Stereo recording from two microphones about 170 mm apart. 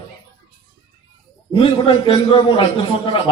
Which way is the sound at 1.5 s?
30° left (ahead or behind).